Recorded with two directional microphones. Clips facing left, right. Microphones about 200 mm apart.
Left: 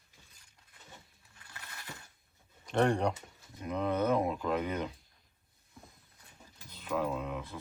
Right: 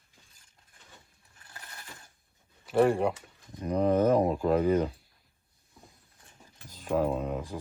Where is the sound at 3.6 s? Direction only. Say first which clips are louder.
Right 7 dB; 40° right (ahead or behind).